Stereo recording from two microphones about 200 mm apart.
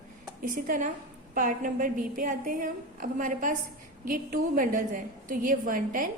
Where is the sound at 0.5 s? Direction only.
45° right (ahead or behind).